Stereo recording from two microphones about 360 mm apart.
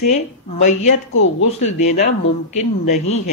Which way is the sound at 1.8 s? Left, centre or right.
Centre.